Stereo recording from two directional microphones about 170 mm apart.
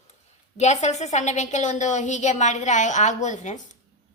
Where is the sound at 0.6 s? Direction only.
40° left (ahead or behind).